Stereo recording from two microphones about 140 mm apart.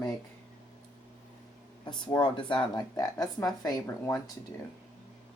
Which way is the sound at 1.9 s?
30° left (ahead or behind).